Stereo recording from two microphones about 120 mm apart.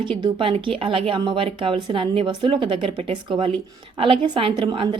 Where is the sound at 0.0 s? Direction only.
45° right (ahead or behind).